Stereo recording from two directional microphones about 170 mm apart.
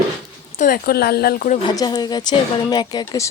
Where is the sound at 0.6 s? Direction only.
60° left (ahead or behind).